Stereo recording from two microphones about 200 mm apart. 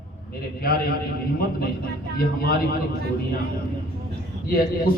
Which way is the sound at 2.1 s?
50° left (ahead or behind).